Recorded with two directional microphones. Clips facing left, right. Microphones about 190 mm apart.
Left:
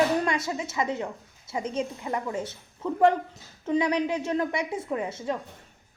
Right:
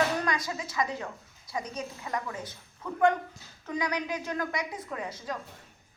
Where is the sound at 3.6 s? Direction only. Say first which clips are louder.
Left 8 dB; 25° left (ahead or behind).